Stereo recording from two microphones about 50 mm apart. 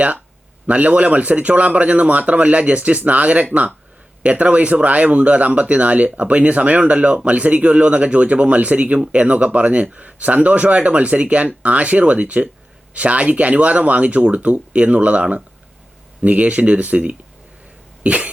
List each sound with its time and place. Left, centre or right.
0.7 s a man's voice: right
18.0 s cough: right